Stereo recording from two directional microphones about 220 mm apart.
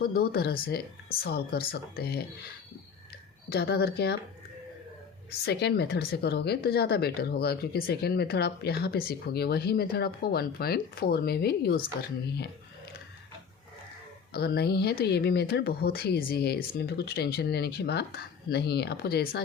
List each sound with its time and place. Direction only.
0.0 s speech: 40° left (ahead or behind)
3.5 s speech: 45° left (ahead or behind)
5.3 s speech: 50° left (ahead or behind)
14.3 s speech: 45° left (ahead or behind)